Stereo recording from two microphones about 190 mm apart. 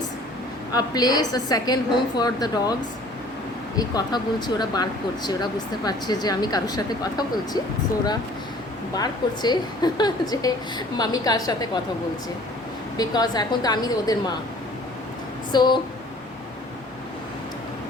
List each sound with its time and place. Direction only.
0.7 s speech: 20° left (ahead or behind)
3.8 s speech: 20° left (ahead or behind)
9.0 s speech: 20° left (ahead or behind)
13.0 s speech: 20° left (ahead or behind)
15.5 s speech: 25° left (ahead or behind)